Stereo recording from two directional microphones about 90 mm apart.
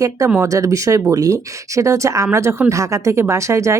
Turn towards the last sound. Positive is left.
turn(degrees=-35)  # may be behind; listen again after turning